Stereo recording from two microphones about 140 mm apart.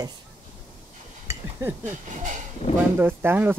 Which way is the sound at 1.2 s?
15° right (ahead or behind).